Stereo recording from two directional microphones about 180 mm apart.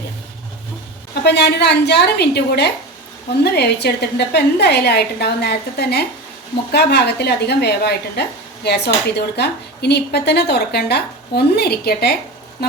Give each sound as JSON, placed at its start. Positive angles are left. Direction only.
{"t": 1.2, "sound": "a woman's voice", "side_deg": 65}